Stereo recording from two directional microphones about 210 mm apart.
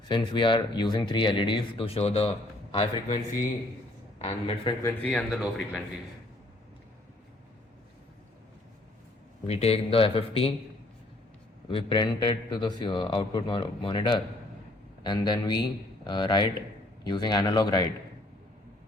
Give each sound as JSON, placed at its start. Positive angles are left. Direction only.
{"t": 0.1, "sound": "speech", "side_deg": 20}
{"t": 2.7, "sound": "speech", "side_deg": 20}
{"t": 4.2, "sound": "speech", "side_deg": 25}
{"t": 4.8, "sound": "speech", "side_deg": 10}
{"t": 9.5, "sound": "speech", "side_deg": 30}
{"t": 11.7, "sound": "speech", "side_deg": 25}